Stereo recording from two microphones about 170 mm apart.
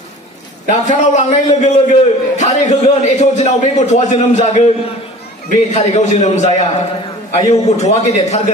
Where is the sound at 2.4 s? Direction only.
40° left (ahead or behind).